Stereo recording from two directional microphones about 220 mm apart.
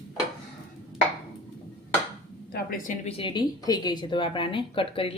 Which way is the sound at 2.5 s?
40° left (ahead or behind).